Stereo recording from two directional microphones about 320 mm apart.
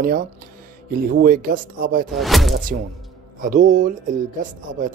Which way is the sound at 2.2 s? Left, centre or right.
Centre.